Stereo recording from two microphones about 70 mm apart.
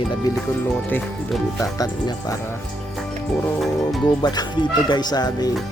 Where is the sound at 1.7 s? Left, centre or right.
Left.